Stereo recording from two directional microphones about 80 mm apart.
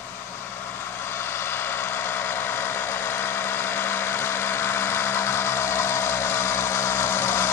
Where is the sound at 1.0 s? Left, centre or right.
Left.